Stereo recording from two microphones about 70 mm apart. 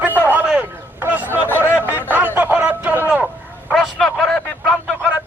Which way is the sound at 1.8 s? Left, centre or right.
Right.